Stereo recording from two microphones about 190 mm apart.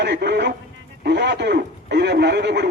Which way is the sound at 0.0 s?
60° right (ahead or behind).